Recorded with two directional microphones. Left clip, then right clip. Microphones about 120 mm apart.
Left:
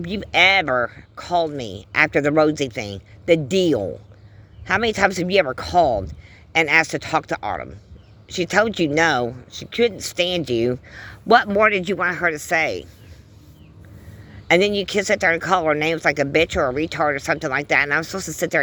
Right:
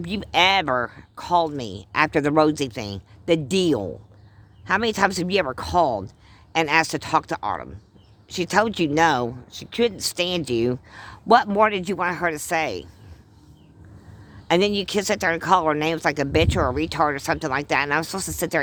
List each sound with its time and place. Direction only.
0.0 s speech: 35° right (ahead or behind)
14.4 s speech: 25° right (ahead or behind)